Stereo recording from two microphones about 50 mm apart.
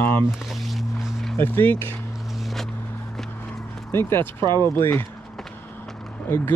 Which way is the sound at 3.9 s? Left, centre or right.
Left.